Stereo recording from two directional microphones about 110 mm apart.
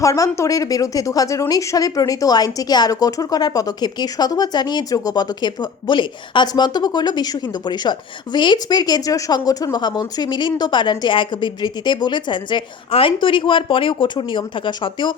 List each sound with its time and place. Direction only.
0.0 s a woman's voice: 30° left (ahead or behind); by 15.1 s 45° left (ahead or behind)